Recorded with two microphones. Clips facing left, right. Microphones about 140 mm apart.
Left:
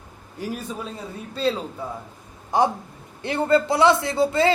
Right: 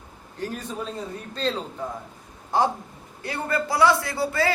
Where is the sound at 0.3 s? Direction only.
10° left (ahead or behind).